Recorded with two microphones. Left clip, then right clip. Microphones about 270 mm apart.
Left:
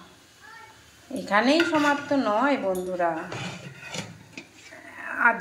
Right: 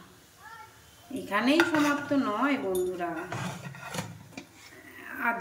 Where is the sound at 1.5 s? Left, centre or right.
Centre.